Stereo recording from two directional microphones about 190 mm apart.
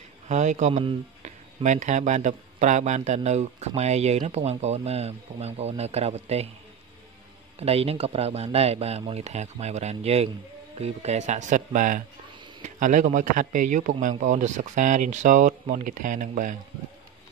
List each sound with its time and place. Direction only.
0.3 s speech: 40° right (ahead or behind)
7.5 s speech: 30° right (ahead or behind)